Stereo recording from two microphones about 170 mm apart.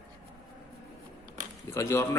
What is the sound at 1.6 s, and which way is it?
Speech, 20° left (ahead or behind).